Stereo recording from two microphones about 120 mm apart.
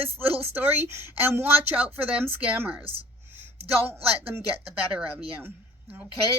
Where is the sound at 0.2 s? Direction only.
15° right (ahead or behind).